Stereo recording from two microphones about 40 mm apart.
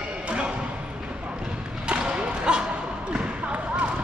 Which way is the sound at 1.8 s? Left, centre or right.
Right.